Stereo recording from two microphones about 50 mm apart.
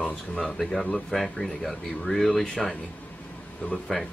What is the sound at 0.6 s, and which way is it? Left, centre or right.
Speech, centre.